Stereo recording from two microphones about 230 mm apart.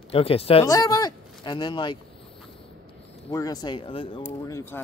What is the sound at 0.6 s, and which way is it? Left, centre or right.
Speech, centre.